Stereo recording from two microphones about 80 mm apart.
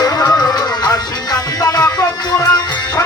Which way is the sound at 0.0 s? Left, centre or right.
Left.